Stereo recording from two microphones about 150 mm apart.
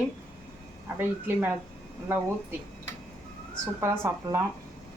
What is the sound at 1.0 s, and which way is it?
Speech, 10° right (ahead or behind).